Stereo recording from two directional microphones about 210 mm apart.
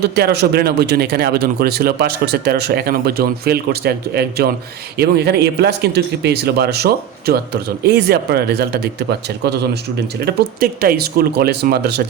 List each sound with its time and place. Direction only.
0.0 s speech: 50° right (ahead or behind)
10.2 s speech: 50° right (ahead or behind)